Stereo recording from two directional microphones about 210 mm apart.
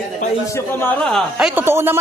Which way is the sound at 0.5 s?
10° left (ahead or behind).